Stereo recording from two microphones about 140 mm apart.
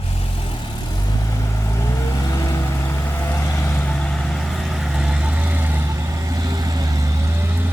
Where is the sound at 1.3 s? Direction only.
20° left (ahead or behind).